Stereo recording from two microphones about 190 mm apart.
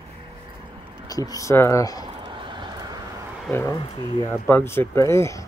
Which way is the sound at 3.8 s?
30° left (ahead or behind).